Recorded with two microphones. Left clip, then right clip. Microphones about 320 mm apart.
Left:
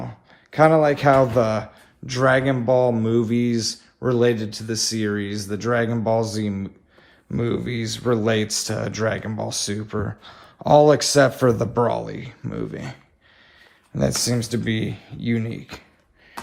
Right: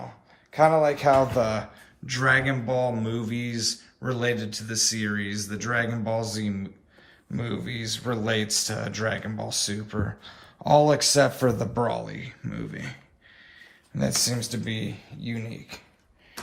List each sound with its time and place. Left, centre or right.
0.5 s speech: left